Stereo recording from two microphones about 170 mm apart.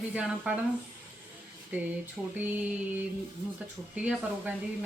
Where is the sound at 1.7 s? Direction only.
10° right (ahead or behind).